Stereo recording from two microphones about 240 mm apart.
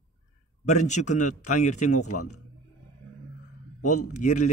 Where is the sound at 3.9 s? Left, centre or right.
Left.